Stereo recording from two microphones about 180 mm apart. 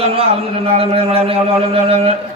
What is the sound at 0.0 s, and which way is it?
A man's voice, 35° right (ahead or behind).